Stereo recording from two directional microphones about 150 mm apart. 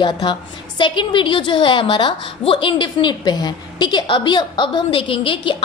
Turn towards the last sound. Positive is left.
turn(degrees=35)  # may be behind; listen again after turning